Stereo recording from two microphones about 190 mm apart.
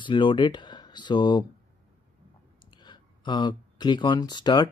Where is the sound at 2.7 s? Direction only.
25° left (ahead or behind).